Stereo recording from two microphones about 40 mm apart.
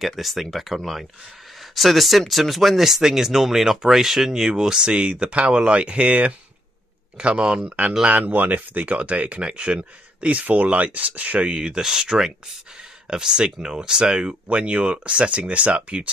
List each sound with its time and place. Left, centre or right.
0.1 s speech: centre; by 6.3 s right
7.2 s speech: right
8.1 s speech: right
11.8 s speech: centre; by 16.1 s right